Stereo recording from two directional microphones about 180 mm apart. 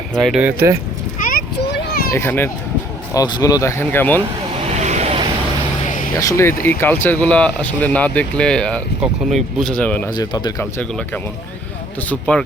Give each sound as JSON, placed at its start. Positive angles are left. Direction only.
{"t": 0.2, "sound": "speech", "side_deg": 0}
{"t": 1.2, "sound": "a sound", "side_deg": 50}
{"t": 2.0, "sound": "speech", "side_deg": 15}
{"t": 4.6, "sound": "vehicle", "side_deg": -40}
{"t": 5.8, "sound": "vehicle", "side_deg": 45}
{"t": 6.1, "sound": "speech", "side_deg": 15}
{"t": 10.1, "sound": "speech", "side_deg": 25}
{"t": 10.8, "sound": "speech", "side_deg": 10}